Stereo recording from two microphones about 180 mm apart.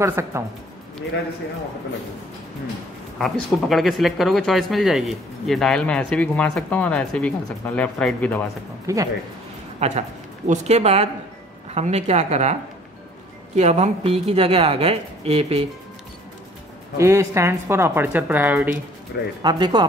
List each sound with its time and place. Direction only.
0.0 s speech: 15° right (ahead or behind)
3.2 s speech: centre (ahead or behind)
8.8 s speech: 20° right (ahead or behind)
9.8 s speech: 35° right (ahead or behind)
13.6 s speech: 40° right (ahead or behind)
16.9 s speech: 15° right (ahead or behind)
19.4 s speech: 25° right (ahead or behind)